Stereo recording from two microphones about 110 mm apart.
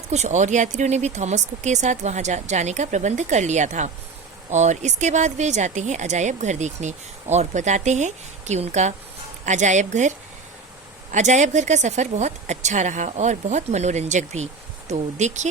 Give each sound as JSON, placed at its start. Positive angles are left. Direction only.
{"t": 0.1, "sound": "speech", "side_deg": -90}
{"t": 11.1, "sound": "speech", "side_deg": -90}